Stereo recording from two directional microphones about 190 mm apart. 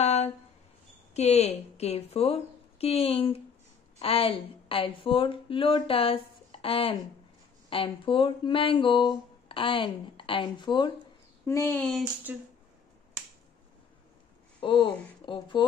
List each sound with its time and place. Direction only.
0.0 s a sound: 35° left (ahead or behind)
1.1 s a woman's voice: 35° left (ahead or behind)
11.4 s speech: 15° left (ahead or behind)
12.3 s speech: 10° right (ahead or behind)
14.6 s speech: 25° left (ahead or behind)